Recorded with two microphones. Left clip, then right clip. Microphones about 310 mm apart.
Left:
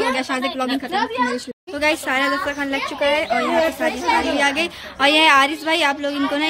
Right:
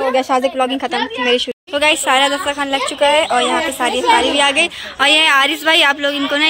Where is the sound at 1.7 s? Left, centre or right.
Centre.